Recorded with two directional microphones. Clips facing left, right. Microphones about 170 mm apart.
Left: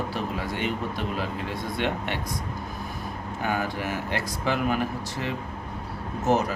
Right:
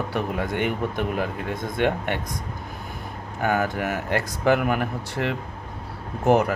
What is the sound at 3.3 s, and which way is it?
Speech, 50° right (ahead or behind).